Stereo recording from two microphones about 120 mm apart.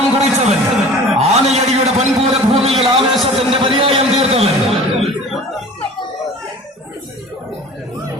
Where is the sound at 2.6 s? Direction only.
60° right (ahead or behind).